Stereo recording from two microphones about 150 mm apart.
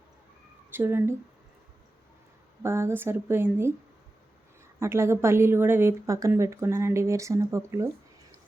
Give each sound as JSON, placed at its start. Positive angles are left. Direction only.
{"t": 0.7, "sound": "a woman's voice", "side_deg": -15}
{"t": 2.6, "sound": "a woman's voice", "side_deg": -15}
{"t": 4.8, "sound": "a woman's voice", "side_deg": -15}